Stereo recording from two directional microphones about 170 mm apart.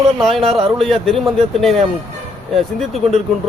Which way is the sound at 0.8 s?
Centre (ahead or behind).